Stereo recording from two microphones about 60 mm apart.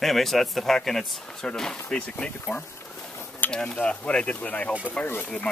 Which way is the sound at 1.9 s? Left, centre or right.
Centre.